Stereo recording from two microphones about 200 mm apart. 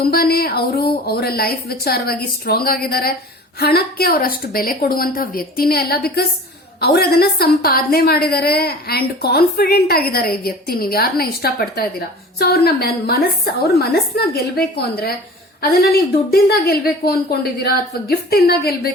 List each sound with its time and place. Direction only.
0.0 s a woman's voice: 50° left (ahead or behind)